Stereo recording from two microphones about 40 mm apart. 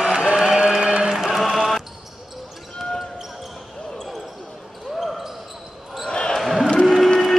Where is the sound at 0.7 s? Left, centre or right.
Right.